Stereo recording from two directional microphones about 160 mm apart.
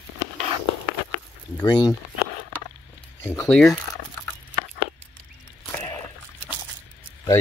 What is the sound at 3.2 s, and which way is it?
Speech, 20° left (ahead or behind).